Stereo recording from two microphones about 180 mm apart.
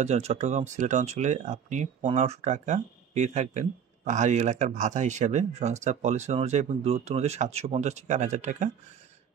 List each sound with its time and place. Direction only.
0.0 s speech: 40° right (ahead or behind)